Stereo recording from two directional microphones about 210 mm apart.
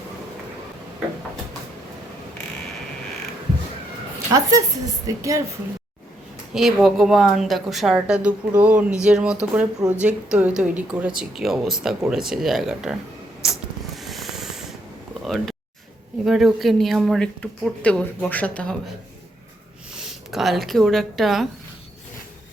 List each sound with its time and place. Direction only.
4.3 s a woman's voice: 15° right (ahead or behind)
6.5 s speech: centre (ahead or behind)
13.4 s a sound: centre (ahead or behind)
16.2 s speech: centre (ahead or behind)
20.0 s speech: centre (ahead or behind)